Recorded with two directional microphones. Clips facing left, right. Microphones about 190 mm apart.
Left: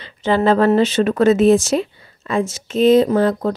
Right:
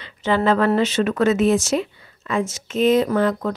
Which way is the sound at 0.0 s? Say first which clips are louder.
Left 3 dB; 35° left (ahead or behind).